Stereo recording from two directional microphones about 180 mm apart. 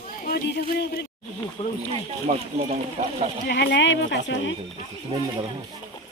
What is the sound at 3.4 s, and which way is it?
Speech, 65° left (ahead or behind).